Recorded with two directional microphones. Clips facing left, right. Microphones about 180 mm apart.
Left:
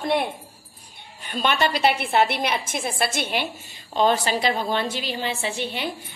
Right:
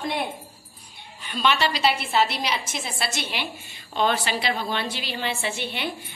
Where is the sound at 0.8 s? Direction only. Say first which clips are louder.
Even; 50° left (ahead or behind).